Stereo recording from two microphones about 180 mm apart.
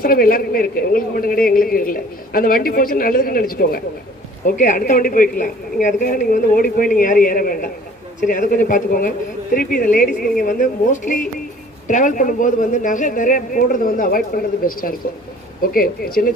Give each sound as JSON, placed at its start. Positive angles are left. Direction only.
{"t": 0.0, "sound": "a man's voice", "side_deg": 55}
{"t": 4.4, "sound": "a woman's voice", "side_deg": 45}